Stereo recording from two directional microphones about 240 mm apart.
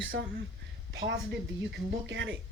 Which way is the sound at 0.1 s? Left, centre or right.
Right.